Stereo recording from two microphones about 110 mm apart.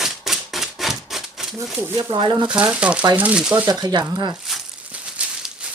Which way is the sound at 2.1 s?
45° right (ahead or behind).